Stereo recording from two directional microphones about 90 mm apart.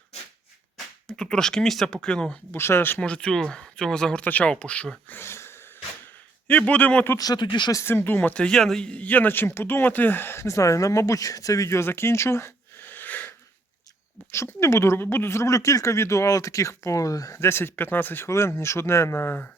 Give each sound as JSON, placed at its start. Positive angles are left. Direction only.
{"t": 1.0, "sound": "speech", "side_deg": 10}
{"t": 2.5, "sound": "speech", "side_deg": 30}
{"t": 3.0, "sound": "speech", "side_deg": 10}
{"t": 6.5, "sound": "speech", "side_deg": 15}
{"t": 7.2, "sound": "speech", "side_deg": 45}
{"t": 7.4, "sound": "speech", "side_deg": 60}
{"t": 7.7, "sound": "speech", "side_deg": 30}
{"t": 14.3, "sound": "speech", "side_deg": 30}